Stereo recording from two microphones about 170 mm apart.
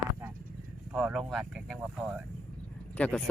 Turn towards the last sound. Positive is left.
turn(degrees=10)  # may be behind; listen again after turning